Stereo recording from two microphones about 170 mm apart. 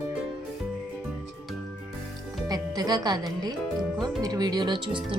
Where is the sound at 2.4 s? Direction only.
20° right (ahead or behind).